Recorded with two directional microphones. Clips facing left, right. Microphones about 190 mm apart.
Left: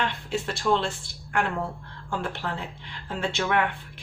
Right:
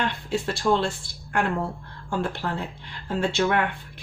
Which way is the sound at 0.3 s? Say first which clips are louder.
Right 2 dB; 35° right (ahead or behind).